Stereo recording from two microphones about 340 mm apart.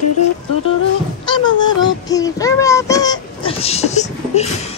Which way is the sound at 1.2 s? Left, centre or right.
Centre.